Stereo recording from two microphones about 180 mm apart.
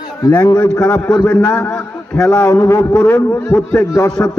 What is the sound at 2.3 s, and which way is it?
A man's voice, 20° left (ahead or behind).